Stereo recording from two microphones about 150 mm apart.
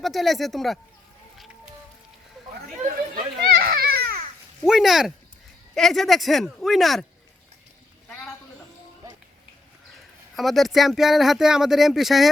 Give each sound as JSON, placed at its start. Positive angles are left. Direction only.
{"t": 0.0, "sound": "speech", "side_deg": 0}
{"t": 3.5, "sound": "children playing", "side_deg": -85}
{"t": 4.6, "sound": "speech", "side_deg": 0}
{"t": 9.0, "sound": "a sound", "side_deg": -25}
{"t": 10.3, "sound": "speech", "side_deg": 0}